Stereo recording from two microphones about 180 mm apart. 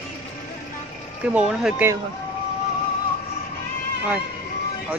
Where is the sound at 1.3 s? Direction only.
5° right (ahead or behind).